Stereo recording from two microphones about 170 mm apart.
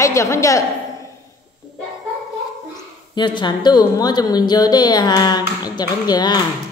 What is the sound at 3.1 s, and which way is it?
A woman's voice, 25° left (ahead or behind).